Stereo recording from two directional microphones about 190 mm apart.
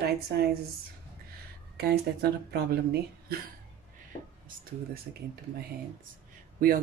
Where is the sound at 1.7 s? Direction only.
60° right (ahead or behind).